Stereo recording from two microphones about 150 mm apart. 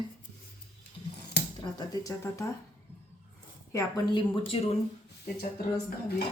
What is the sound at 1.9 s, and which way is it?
Speech, 20° left (ahead or behind).